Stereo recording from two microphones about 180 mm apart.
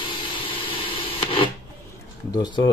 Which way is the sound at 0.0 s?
25° left (ahead or behind).